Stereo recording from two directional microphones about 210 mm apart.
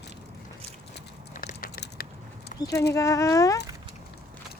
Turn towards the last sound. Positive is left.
turn(degrees=15)  # may be behind; listen again after turning